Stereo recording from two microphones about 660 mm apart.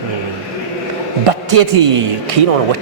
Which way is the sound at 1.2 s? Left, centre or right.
Right.